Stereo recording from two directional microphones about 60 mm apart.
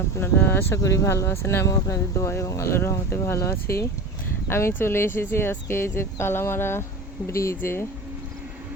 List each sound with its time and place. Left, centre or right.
0.3 s speech: left
0.8 s speech: left
1.6 s speech: left
7.6 s speech: left